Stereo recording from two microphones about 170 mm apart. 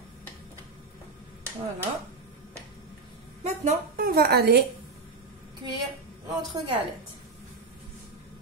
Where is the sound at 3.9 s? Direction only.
60° right (ahead or behind).